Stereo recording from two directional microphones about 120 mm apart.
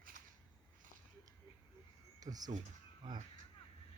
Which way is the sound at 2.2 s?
30° right (ahead or behind).